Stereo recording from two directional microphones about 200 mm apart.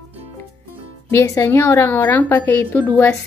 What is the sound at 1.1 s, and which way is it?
A woman's voice, 15° left (ahead or behind).